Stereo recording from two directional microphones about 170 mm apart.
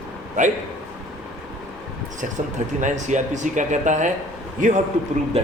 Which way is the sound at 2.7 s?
45° right (ahead or behind).